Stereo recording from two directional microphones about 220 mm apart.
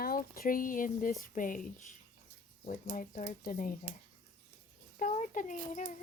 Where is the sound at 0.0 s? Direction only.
40° left (ahead or behind).